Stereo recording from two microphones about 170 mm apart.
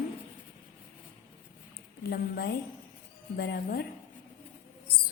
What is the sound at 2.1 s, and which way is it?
A woman's voice, 65° left (ahead or behind).